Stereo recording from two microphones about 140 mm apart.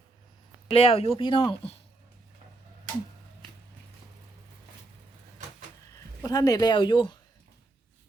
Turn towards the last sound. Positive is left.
turn(degrees=35)  # may be behind; listen again after turning